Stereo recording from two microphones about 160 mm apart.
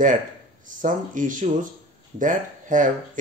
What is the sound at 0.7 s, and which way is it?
Speech, 55° right (ahead or behind).